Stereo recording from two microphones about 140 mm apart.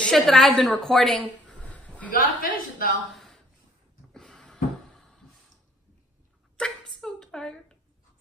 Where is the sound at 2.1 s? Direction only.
85° left.